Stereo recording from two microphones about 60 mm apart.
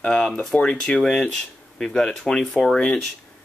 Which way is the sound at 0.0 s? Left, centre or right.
Centre.